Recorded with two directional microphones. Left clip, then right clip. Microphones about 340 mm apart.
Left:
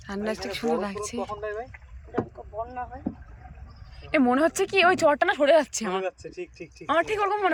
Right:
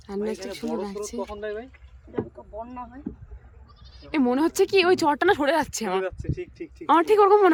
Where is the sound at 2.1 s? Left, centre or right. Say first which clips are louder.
Left 1 dB; left.